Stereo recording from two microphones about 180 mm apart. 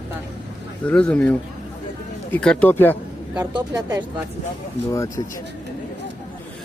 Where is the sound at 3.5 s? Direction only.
20° right (ahead or behind).